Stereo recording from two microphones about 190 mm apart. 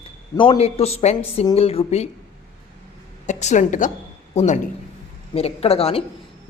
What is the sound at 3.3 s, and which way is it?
A man's voice, 40° left (ahead or behind).